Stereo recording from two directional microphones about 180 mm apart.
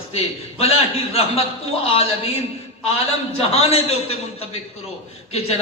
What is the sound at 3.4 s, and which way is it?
Speech, 35° left (ahead or behind).